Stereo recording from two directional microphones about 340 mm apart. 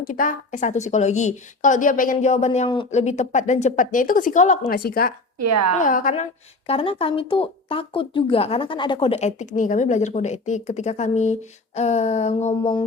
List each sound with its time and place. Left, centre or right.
0.0 s speech: left
5.4 s a woman's voice: right
5.8 s speech: left